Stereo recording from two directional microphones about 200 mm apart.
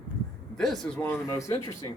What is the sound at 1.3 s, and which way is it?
Speech, 15° left (ahead or behind).